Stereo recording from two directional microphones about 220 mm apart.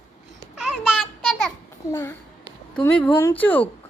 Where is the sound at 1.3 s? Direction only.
Centre (ahead or behind).